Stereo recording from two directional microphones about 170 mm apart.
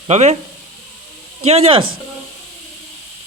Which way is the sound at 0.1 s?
40° right (ahead or behind).